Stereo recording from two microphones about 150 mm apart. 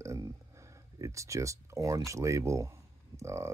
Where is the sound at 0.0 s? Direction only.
20° right (ahead or behind).